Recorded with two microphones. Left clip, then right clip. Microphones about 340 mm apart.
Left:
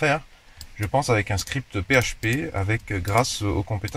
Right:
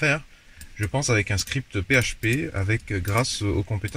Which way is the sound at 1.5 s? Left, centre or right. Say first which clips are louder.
Left 2 dB; centre.